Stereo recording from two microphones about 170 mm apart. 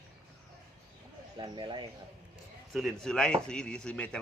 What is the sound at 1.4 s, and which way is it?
Speech, 25° right (ahead or behind).